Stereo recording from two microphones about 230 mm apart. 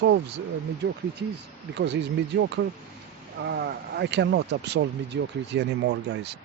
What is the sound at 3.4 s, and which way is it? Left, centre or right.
Speech, right.